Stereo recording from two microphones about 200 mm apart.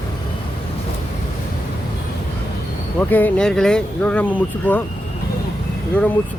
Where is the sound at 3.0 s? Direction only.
10° left (ahead or behind).